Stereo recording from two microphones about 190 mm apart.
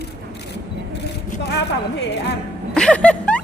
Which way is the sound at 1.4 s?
60° left (ahead or behind).